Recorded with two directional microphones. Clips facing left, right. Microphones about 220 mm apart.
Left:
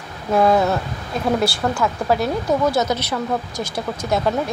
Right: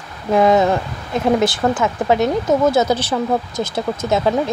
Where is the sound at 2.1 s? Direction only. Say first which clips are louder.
Right 4 dB; 20° right (ahead or behind).